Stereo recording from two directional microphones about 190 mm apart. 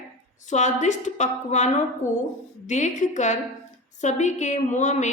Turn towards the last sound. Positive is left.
turn(degrees=40)  # may be behind; listen again after turning